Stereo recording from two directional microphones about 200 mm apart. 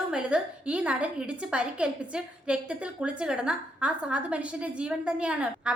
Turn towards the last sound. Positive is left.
turn(degrees=-5)  # may be behind; listen again after turning